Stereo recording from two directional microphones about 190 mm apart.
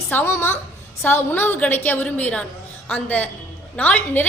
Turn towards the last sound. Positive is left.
turn(degrees=10)  # may be behind; listen again after turning